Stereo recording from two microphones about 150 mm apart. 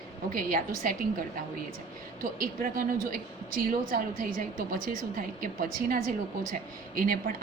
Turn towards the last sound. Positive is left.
turn(degrees=-75)  # may be behind; listen again after turning